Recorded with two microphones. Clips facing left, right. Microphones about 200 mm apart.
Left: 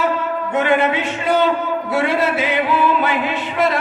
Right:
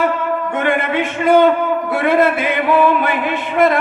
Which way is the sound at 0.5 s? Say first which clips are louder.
Left 3 dB; 55° right (ahead or behind).